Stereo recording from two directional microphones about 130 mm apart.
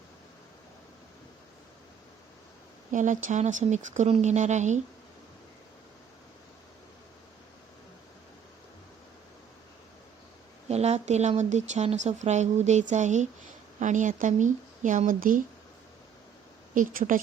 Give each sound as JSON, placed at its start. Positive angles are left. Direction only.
{"t": 2.9, "sound": "speech", "side_deg": -80}
{"t": 10.7, "sound": "speech", "side_deg": -55}
{"t": 16.7, "sound": "speech", "side_deg": -90}